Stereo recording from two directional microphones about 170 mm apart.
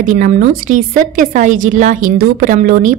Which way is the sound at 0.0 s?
50° right (ahead or behind).